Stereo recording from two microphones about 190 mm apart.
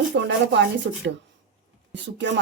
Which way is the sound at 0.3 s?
70° right (ahead or behind).